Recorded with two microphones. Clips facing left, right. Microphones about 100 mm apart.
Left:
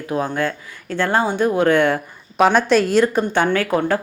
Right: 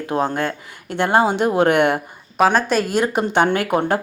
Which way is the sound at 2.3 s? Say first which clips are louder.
Left 2 dB; centre (ahead or behind).